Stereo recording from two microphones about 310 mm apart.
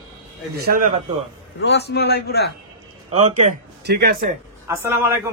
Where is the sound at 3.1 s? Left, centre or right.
Centre.